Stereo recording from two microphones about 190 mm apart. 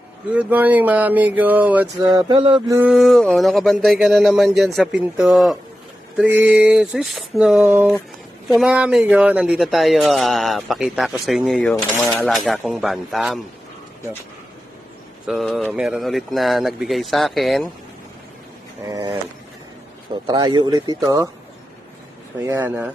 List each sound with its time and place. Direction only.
0.3 s a sound: 10° right (ahead or behind)
2.1 s speech: 25° right (ahead or behind)
2.7 s speech: 5° right (ahead or behind)
15.3 s speech: centre (ahead or behind)
18.9 s speech: 15° right (ahead or behind)
20.2 s speech: 25° right (ahead or behind)
22.4 s a sound: 10° right (ahead or behind)